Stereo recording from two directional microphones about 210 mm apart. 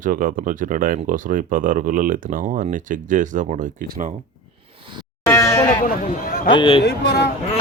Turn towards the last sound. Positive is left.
turn(degrees=50)  # may be behind; listen again after turning